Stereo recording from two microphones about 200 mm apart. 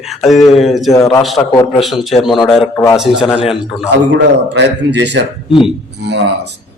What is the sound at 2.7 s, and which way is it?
Speech, 15° left (ahead or behind).